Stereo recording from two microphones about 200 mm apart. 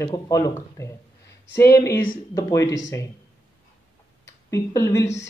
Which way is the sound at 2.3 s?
15° left (ahead or behind).